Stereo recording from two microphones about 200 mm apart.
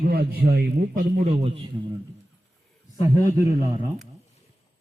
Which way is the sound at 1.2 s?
30° right (ahead or behind).